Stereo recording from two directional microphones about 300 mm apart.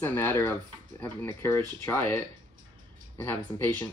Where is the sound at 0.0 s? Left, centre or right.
Centre.